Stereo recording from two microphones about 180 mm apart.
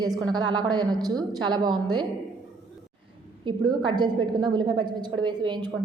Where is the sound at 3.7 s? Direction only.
25° right (ahead or behind).